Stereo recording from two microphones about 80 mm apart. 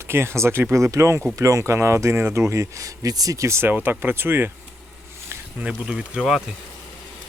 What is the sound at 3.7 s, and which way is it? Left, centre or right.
Speech, right.